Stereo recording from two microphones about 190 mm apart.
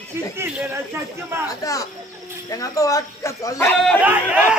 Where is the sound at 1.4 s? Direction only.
15° left (ahead or behind).